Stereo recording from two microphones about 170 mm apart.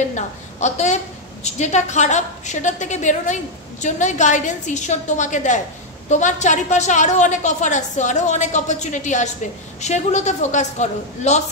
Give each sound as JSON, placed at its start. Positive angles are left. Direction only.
{"t": 0.1, "sound": "a woman's voice", "side_deg": 45}